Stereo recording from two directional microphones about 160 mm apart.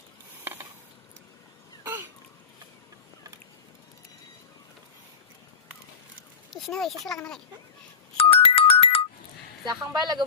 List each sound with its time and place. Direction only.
0.3 s a sound: 15° right (ahead or behind)
1.8 s throat clearing: 10° right (ahead or behind)
6.5 s a child's voice: centre (ahead or behind)
8.2 s music: 35° left (ahead or behind)
9.6 s speech: 25° right (ahead or behind)